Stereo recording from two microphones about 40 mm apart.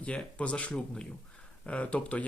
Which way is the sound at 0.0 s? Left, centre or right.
Left.